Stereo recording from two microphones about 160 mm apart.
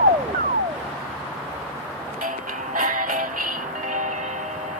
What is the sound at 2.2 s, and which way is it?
Music, 55° right (ahead or behind).